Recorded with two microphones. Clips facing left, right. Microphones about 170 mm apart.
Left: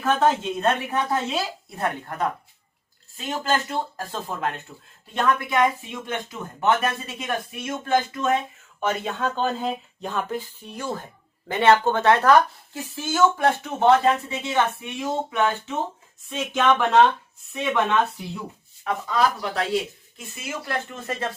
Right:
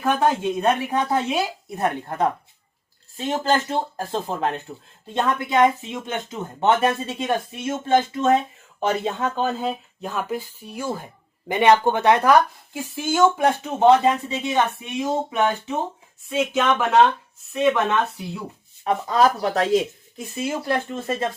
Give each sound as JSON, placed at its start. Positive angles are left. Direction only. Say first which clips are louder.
{"t": 0.0, "sound": "speech", "louder": "right 1 dB", "side_deg": -10}
{"t": 9.1, "sound": "speech", "louder": "right 1 dB", "side_deg": -10}
{"t": 19.0, "sound": "speech", "louder": "right 4 dB", "side_deg": -40}
{"t": 20.3, "sound": "speech", "louder": "right 6 dB", "side_deg": -30}